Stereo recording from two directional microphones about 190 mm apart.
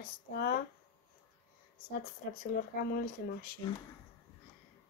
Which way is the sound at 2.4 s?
50° left (ahead or behind).